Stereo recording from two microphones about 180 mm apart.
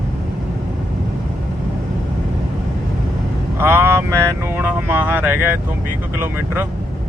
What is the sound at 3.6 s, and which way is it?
Speech, 15° right (ahead or behind).